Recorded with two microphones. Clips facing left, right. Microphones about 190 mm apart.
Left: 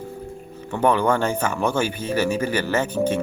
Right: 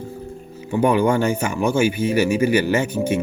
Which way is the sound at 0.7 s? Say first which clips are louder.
Right 2 dB; 10° right (ahead or behind).